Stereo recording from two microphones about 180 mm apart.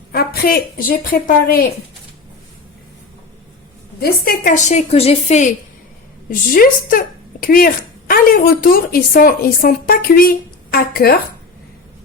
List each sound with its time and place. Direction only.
0.1 s a woman's voice: 55° left (ahead or behind)
4.0 s a woman's voice: 50° left (ahead or behind)
6.3 s speech: 50° left (ahead or behind)